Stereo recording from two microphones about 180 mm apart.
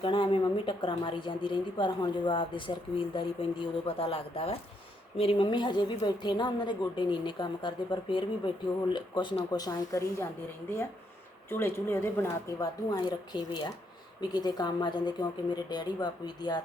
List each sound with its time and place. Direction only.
0.0 s a woman's voice: 30° left (ahead or behind)
11.4 s a woman's voice: 10° left (ahead or behind)